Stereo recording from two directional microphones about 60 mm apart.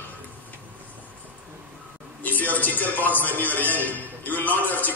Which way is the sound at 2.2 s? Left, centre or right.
Left.